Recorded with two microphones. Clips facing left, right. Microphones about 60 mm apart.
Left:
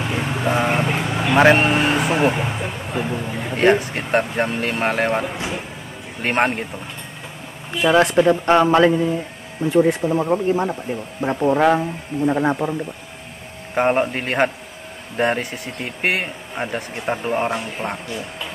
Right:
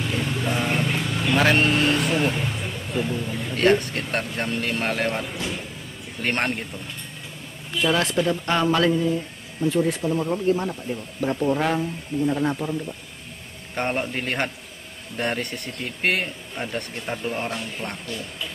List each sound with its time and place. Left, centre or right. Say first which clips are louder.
0.0 s vehicle: left 4 dB; left
3.6 s speech: left 3 dB; centre
6.2 s speech: left 6 dB; centre
7.7 s speech: left 7 dB; left
13.7 s speech: left 8 dB; centre